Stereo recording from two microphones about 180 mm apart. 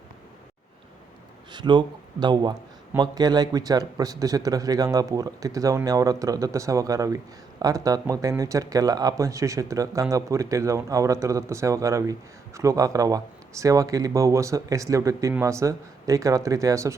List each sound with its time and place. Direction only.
1.5 s speech: 25° right (ahead or behind)